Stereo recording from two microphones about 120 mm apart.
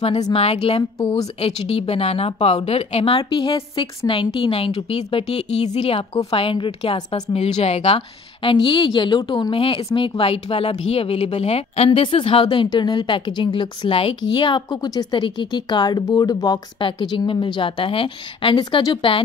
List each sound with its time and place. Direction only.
0.3 s speech: 55° left (ahead or behind)
0.9 s speech: 30° left (ahead or behind)
1.4 s speech: 55° left (ahead or behind)
7.3 s speech: 60° left (ahead or behind); by 19.2 s 40° left (ahead or behind)